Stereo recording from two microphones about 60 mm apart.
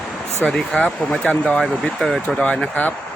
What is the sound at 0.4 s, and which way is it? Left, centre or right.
Speech, centre.